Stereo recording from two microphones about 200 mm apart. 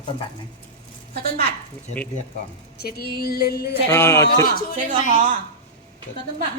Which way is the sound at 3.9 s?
15° left (ahead or behind).